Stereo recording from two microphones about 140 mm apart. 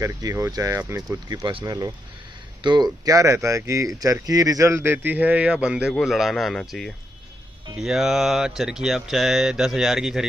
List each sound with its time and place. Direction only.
0.0 s speech: 20° right (ahead or behind); by 10.2 s centre (ahead or behind)